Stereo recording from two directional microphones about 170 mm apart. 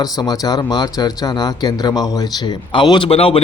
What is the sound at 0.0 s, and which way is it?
Speech, 20° left (ahead or behind).